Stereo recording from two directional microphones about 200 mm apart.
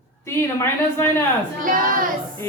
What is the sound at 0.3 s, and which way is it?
Speech, 10° left (ahead or behind).